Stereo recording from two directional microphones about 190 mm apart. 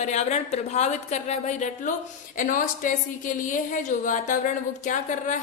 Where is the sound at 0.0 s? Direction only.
35° left (ahead or behind).